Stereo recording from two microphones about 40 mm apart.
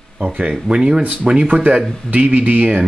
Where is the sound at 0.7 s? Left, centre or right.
Centre.